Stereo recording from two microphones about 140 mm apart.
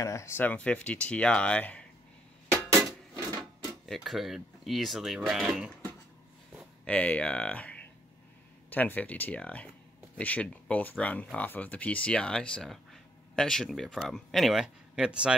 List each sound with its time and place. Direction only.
0.0 s speech: 20° left (ahead or behind)
3.8 s speech: centre (ahead or behind)
6.8 s speech: 10° left (ahead or behind); by 15.3 s 5° right (ahead or behind)